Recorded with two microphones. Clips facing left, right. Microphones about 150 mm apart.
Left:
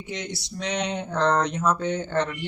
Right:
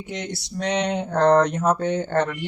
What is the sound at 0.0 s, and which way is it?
Speech, 50° right (ahead or behind).